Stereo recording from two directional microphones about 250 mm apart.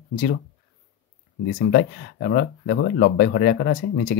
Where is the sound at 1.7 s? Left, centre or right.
Left.